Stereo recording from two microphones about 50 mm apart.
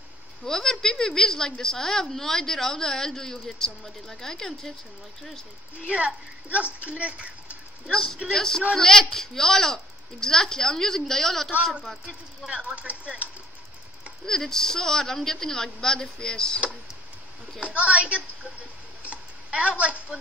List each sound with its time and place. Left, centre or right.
0.5 s speech: centre
5.9 s speech: right
7.8 s speech: centre
12.4 s speech: right
14.2 s speech: centre
17.6 s speech: right
19.0 s tick: right
19.8 s speech: right